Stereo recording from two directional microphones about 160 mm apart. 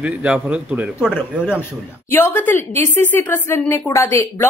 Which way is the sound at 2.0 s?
15° left (ahead or behind).